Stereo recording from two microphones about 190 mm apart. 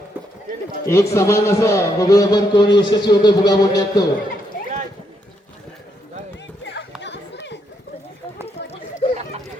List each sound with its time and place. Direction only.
0.9 s speech: 15° left (ahead or behind)
7.0 s chatter: 65° left (ahead or behind)
8.4 s a sound: 30° left (ahead or behind)